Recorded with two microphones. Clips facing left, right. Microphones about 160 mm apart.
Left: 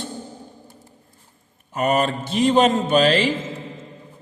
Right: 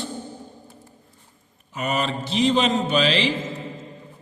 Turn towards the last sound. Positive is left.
turn(degrees=45)  # may be behind; listen again after turning